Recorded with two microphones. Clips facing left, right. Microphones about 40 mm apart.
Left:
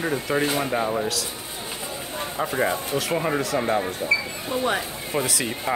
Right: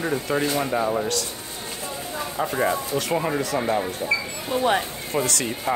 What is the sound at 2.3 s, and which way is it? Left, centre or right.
Speech, centre.